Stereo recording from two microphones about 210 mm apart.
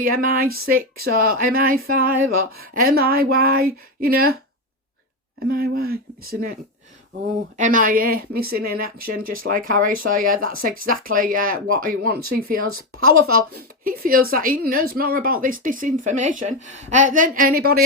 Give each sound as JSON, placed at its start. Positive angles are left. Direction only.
{"t": 0.0, "sound": "speech", "side_deg": -45}
{"t": 5.5, "sound": "speech", "side_deg": -45}
{"t": 7.5, "sound": "a woman's voice", "side_deg": -40}
{"t": 12.6, "sound": "a woman's voice", "side_deg": -80}
{"t": 13.3, "sound": "a woman's voice", "side_deg": -45}